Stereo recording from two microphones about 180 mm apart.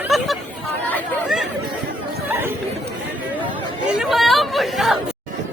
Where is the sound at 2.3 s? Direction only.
10° right (ahead or behind).